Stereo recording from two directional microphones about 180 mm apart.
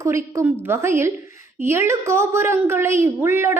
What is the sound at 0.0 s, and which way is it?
A woman's voice, 15° right (ahead or behind).